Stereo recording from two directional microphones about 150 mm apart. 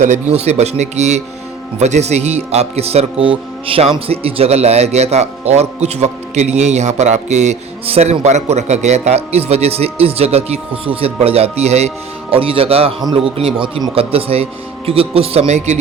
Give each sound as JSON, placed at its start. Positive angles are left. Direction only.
{"t": 0.3, "sound": "speech", "side_deg": -45}